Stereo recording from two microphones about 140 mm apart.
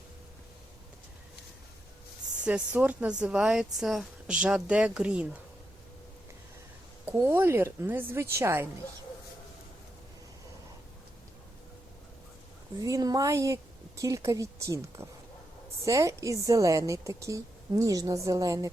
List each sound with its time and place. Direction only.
2.4 s speech: 10° right (ahead or behind)
7.2 s speech: 15° right (ahead or behind)
12.8 s a woman's voice: 25° right (ahead or behind)